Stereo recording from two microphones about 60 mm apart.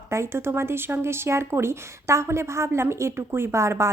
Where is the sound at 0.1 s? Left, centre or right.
Right.